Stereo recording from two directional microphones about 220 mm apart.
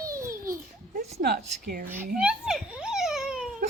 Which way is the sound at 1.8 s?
10° right (ahead or behind).